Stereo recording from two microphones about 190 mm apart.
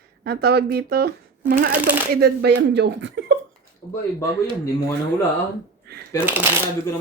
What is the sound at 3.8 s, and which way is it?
Speech, 20° left (ahead or behind).